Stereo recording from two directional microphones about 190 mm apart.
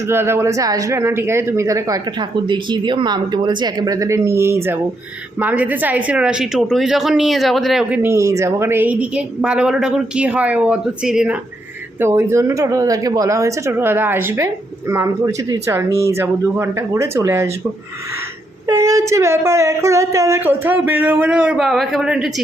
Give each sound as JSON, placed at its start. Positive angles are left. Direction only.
{"t": 0.1, "sound": "speech", "side_deg": -10}
{"t": 18.7, "sound": "speech", "side_deg": -15}